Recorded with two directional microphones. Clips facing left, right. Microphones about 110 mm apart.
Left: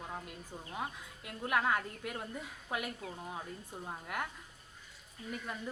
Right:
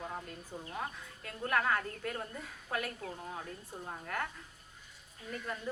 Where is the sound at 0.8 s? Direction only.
15° left (ahead or behind).